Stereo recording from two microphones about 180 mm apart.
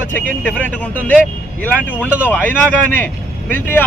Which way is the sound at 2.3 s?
10° left (ahead or behind).